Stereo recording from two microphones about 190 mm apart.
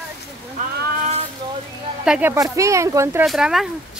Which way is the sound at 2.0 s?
5° right (ahead or behind).